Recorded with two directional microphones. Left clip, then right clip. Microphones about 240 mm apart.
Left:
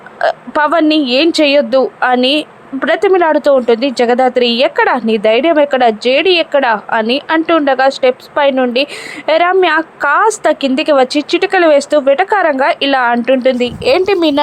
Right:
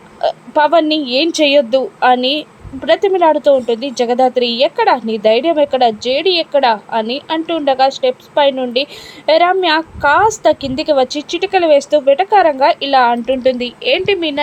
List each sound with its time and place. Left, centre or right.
0.2 s speech: centre
14.2 s a woman's voice: left